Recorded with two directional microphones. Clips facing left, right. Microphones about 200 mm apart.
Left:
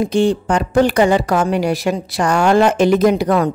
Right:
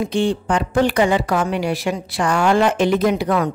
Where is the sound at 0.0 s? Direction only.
40° left (ahead or behind).